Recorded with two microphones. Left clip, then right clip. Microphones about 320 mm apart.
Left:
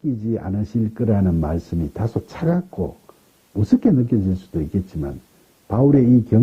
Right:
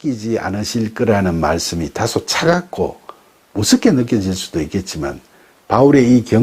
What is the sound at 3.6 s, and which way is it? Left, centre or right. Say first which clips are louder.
Speech: right 5 dB; centre.